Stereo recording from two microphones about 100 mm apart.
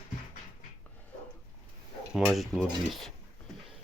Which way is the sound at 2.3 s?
Centre (ahead or behind).